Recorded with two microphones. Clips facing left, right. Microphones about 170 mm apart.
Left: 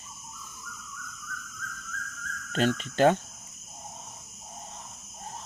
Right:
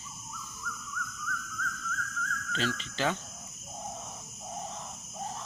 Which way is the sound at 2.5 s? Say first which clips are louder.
Left 8 dB; 50° left (ahead or behind).